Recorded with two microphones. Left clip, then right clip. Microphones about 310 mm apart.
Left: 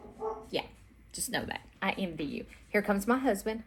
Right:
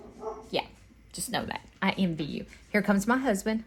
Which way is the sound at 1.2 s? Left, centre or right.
Right.